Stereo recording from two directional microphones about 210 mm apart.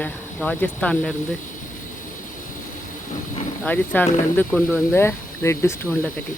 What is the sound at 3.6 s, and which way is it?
Speech, 5° left (ahead or behind).